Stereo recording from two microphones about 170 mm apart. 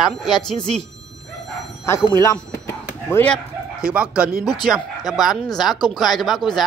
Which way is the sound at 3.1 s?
10° left (ahead or behind).